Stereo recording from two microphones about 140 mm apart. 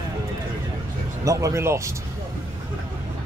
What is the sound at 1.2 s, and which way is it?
Speech, 25° right (ahead or behind).